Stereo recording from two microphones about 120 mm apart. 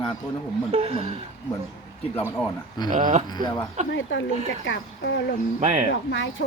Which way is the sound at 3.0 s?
90° right.